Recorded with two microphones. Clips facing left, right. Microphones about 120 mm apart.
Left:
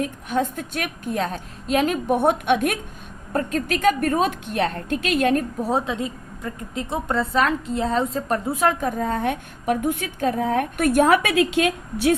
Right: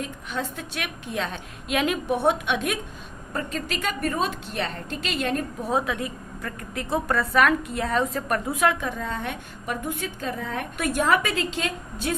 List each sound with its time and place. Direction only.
0.0 s a woman's voice: 50° left (ahead or behind)
5.6 s a woman's voice: 30° left (ahead or behind); by 11.2 s 50° left (ahead or behind)
11.2 s a woman's voice: 75° left (ahead or behind)